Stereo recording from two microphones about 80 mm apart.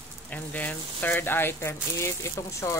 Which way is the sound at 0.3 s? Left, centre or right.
Left.